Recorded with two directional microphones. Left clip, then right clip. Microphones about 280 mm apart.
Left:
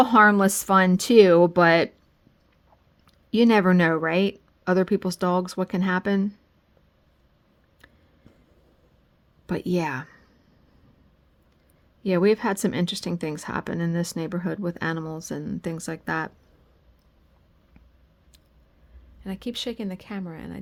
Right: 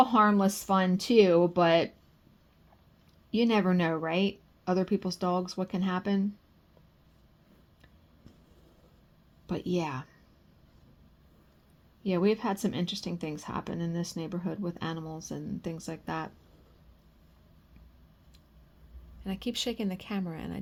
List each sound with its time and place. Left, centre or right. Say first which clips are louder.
0.0 s speech: left 7 dB; left
3.2 s speech: left 8 dB; left
9.5 s speech: left 6 dB; left
12.0 s speech: left 7 dB; left
19.2 s speech: left 2 dB; centre